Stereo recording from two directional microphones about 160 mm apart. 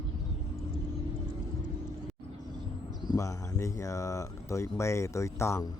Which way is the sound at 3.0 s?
20° left (ahead or behind).